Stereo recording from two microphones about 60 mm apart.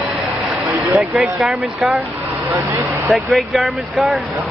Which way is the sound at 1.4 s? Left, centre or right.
Centre.